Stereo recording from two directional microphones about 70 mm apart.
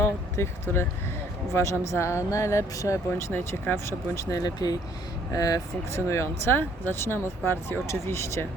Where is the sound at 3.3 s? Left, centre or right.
Left.